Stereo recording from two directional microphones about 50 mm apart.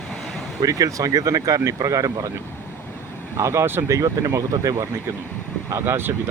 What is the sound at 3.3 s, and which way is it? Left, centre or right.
Speech, right.